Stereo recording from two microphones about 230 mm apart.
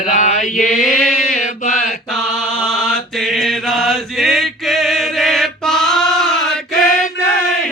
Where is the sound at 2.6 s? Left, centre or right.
Centre.